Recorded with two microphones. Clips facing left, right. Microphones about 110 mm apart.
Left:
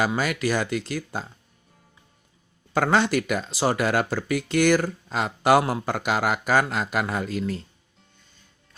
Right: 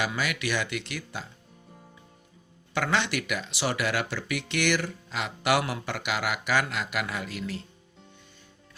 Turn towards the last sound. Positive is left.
turn(degrees=40)  # may be behind; listen again after turning